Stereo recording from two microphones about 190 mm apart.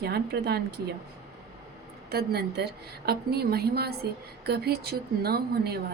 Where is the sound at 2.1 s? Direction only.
55° right (ahead or behind).